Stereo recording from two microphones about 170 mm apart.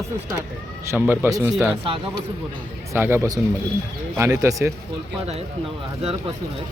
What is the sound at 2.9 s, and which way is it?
Speech, 15° right (ahead or behind).